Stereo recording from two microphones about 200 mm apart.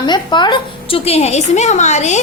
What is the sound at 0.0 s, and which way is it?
A woman's voice, 20° left (ahead or behind).